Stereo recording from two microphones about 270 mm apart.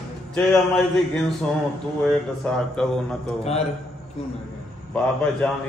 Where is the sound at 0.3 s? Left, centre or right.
Centre.